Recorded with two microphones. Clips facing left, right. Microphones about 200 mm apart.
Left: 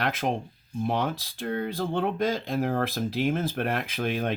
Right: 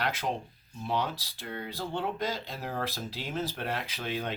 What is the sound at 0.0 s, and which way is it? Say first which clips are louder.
Speech: left 4 dB; 50° left (ahead or behind).